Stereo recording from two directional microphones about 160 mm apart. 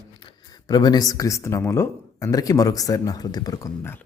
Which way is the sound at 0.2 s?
30° left (ahead or behind).